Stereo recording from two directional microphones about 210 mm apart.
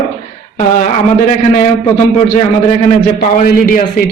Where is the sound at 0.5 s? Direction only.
40° left (ahead or behind).